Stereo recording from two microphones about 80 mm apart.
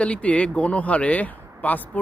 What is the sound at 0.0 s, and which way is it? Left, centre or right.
Speech, centre.